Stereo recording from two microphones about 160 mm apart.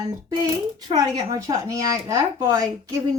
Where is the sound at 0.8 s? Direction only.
25° right (ahead or behind).